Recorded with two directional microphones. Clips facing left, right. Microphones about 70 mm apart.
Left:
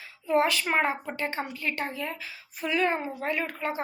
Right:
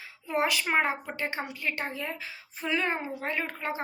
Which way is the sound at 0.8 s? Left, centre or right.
Right.